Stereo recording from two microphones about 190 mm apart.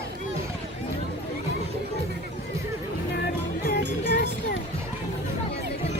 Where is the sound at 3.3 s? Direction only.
50° left (ahead or behind).